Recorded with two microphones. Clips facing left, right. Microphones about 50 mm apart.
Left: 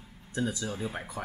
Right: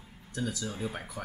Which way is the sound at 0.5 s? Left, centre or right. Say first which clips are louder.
Left 1 dB; centre.